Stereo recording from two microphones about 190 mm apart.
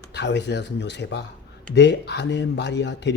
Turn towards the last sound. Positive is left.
turn(degrees=65)  # may be behind; listen again after turning